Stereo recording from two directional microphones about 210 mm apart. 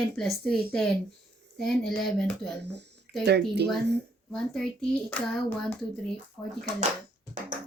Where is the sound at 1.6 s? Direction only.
Centre (ahead or behind).